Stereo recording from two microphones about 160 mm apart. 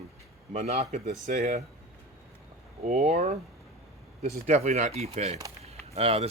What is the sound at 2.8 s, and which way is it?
Speech, 45° right (ahead or behind).